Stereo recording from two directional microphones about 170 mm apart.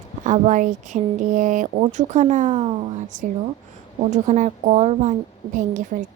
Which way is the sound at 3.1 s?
45° right (ahead or behind).